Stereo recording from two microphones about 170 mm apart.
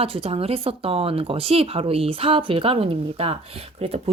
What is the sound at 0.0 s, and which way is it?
Speech, 35° right (ahead or behind).